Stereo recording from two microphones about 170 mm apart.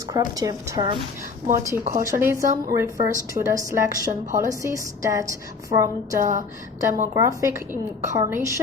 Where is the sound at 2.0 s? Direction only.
15° right (ahead or behind).